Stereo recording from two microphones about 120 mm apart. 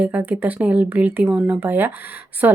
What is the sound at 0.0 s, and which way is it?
A woman's voice, 10° right (ahead or behind).